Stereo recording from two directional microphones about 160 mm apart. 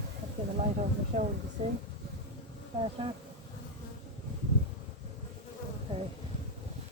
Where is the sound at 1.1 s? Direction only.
50° right (ahead or behind).